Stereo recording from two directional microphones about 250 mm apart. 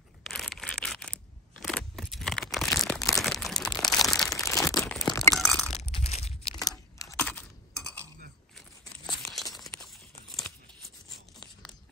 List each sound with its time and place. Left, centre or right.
0.3 s scissors: centre
4.4 s crumpling: centre
4.7 s crushing: centre
5.3 s crunch: centre
5.8 s a sound: left
7.0 s computer keyboard: centre
8.5 s tearing: centre